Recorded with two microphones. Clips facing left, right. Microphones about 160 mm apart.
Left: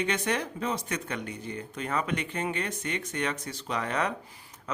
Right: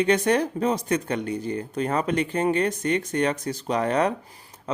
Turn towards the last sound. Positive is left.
turn(degrees=-35)  # may be behind; listen again after turning